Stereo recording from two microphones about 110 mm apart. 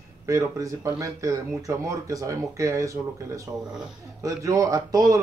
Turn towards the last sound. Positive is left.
turn(degrees=-35)  # may be behind; listen again after turning